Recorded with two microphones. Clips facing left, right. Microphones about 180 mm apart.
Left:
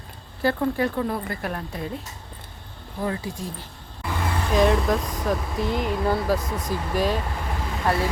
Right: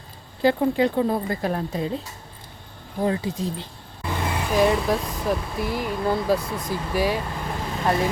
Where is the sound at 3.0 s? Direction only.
20° right (ahead or behind).